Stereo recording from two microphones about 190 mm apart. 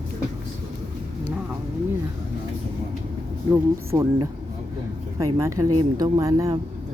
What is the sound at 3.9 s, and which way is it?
Speech, 15° right (ahead or behind).